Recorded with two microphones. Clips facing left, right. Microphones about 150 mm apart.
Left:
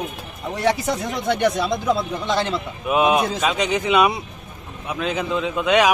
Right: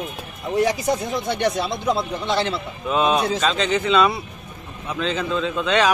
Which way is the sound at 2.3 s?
45° left (ahead or behind).